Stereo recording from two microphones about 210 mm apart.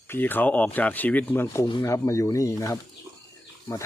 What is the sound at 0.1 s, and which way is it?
Speech, 10° left (ahead or behind).